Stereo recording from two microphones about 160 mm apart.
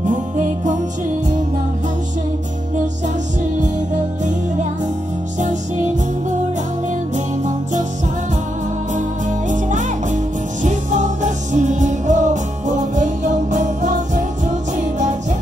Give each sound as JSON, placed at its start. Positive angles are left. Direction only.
{"t": 0.1, "sound": "music", "side_deg": -50}
{"t": 7.2, "sound": "music", "side_deg": -50}
{"t": 9.5, "sound": "music", "side_deg": -50}